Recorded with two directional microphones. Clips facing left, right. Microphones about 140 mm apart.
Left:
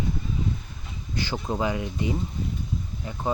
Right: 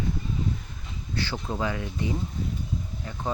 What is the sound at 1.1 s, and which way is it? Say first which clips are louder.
Mechanisms: left 2 dB; 15° left (ahead or behind).